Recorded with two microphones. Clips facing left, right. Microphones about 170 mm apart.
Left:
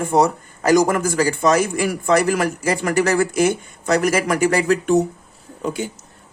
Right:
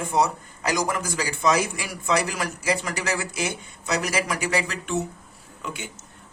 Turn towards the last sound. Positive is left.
turn(degrees=35)  # may be behind; listen again after turning